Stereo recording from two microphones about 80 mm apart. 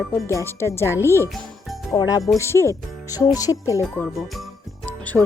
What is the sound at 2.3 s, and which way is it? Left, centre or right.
Speech, left.